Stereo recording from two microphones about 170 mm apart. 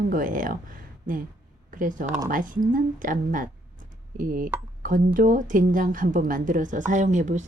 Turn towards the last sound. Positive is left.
turn(degrees=-45)  # may be behind; listen again after turning